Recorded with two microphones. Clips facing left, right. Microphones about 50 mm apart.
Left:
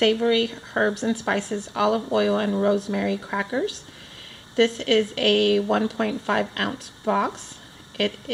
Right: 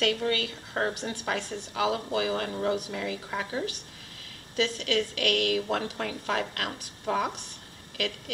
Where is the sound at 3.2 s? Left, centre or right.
Centre.